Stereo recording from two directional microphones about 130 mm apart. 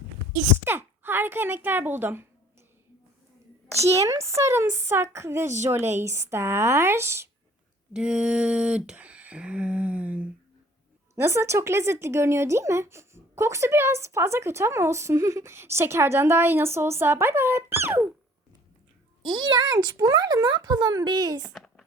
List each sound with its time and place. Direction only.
0.6 s speech: 15° right (ahead or behind)
3.8 s speech: 25° right (ahead or behind)
7.9 s a sound: 5° right (ahead or behind)
11.1 s speech: 20° right (ahead or behind)
19.2 s speech: 35° right (ahead or behind)
21.4 s a sound: centre (ahead or behind)